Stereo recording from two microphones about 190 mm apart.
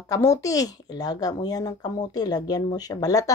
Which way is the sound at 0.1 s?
15° left (ahead or behind).